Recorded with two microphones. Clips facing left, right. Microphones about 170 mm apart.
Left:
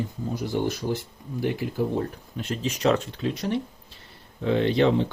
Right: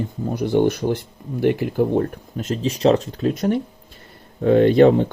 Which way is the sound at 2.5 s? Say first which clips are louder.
Right 6 dB; 35° right (ahead or behind).